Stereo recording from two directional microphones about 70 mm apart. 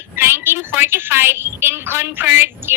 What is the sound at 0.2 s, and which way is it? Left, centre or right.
A woman's voice, right.